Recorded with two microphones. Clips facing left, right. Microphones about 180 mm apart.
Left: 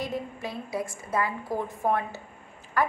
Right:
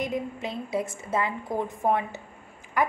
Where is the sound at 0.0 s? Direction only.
20° right (ahead or behind).